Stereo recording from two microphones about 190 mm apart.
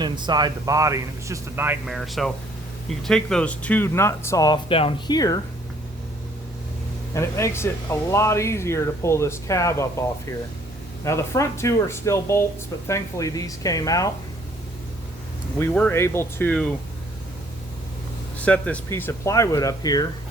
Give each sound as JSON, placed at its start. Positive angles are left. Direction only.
{"t": 0.0, "sound": "speech", "side_deg": -20}
{"t": 2.0, "sound": "speech", "side_deg": 0}
{"t": 7.1, "sound": "speech", "side_deg": 15}
{"t": 11.0, "sound": "speech", "side_deg": 15}
{"t": 15.5, "sound": "speech", "side_deg": 10}
{"t": 18.4, "sound": "speech", "side_deg": 5}